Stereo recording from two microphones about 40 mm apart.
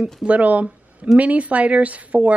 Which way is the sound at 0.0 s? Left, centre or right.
Right.